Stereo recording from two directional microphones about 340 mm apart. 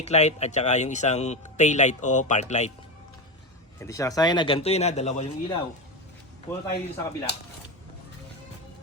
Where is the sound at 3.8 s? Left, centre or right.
Centre.